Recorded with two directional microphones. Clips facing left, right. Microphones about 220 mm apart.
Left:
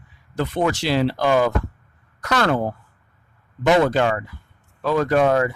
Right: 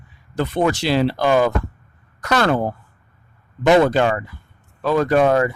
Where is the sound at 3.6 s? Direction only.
30° right (ahead or behind).